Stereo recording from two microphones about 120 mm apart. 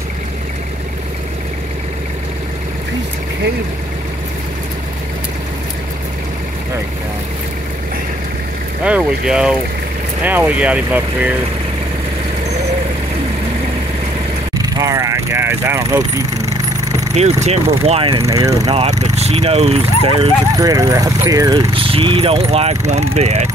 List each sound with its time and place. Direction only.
8.8 s speech: 10° right (ahead or behind)
14.6 s vehicle: 30° right (ahead or behind)
17.1 s speech: 65° right (ahead or behind)
17.8 s speech: 55° right (ahead or behind)
18.1 s mechanisms: 30° right (ahead or behind)
18.7 s speech: 65° right (ahead or behind)
20.5 s speech: 30° right (ahead or behind)
21.7 s speech: 50° right (ahead or behind); by 23.5 s 65° right (ahead or behind)